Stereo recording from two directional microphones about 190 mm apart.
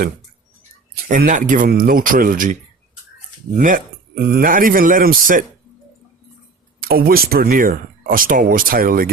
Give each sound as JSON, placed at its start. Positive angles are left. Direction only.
{"t": 1.0, "sound": "speech", "side_deg": -45}
{"t": 6.8, "sound": "speech", "side_deg": -50}